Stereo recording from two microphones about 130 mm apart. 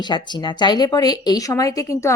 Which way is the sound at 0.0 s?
35° left (ahead or behind).